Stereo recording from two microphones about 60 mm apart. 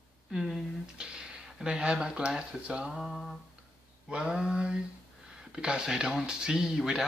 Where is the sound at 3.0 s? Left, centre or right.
Centre.